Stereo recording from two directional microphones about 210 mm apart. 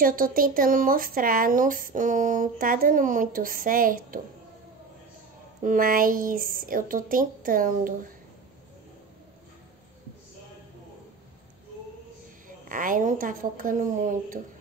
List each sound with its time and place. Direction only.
0.0 s speech: 40° right (ahead or behind)
5.6 s speech: 40° right (ahead or behind)
12.4 s speech: 40° right (ahead or behind)